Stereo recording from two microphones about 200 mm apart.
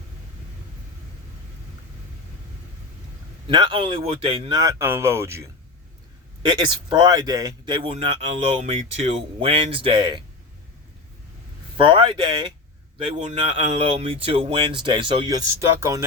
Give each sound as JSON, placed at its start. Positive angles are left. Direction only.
{"t": 3.4, "sound": "speech", "side_deg": -25}
{"t": 6.4, "sound": "speech", "side_deg": -25}
{"t": 11.8, "sound": "speech", "side_deg": -25}